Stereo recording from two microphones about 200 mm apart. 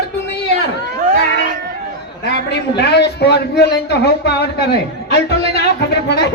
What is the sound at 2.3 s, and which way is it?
A man's voice, 55° left (ahead or behind).